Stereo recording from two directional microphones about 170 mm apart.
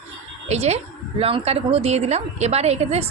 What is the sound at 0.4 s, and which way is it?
A woman's voice, 40° right (ahead or behind).